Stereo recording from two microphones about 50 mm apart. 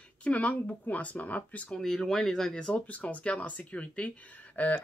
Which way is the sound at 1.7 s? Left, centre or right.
Centre.